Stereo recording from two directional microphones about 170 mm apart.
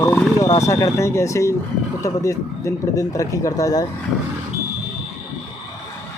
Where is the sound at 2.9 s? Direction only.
20° left (ahead or behind).